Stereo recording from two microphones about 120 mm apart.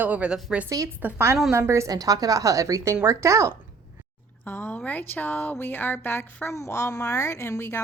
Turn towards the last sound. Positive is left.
turn(degrees=20)  # may be behind; listen again after turning